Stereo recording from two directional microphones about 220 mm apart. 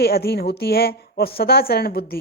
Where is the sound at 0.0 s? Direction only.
45° left (ahead or behind).